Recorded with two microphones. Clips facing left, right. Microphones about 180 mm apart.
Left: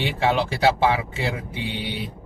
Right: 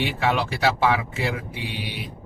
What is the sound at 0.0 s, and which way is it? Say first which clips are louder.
A man's voice: left 1 dB; 30° left (ahead or behind).